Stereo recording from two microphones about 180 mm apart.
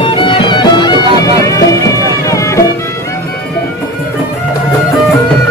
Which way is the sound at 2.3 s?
15° left (ahead or behind).